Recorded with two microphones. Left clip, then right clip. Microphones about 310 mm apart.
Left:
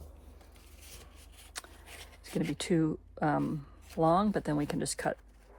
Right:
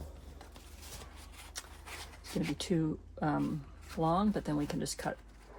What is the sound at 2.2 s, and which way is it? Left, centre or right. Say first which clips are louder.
Speech: left 3 dB; left.